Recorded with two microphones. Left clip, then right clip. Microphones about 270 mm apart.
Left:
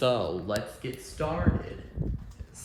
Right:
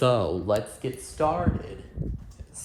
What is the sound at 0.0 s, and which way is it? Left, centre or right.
Speech, right.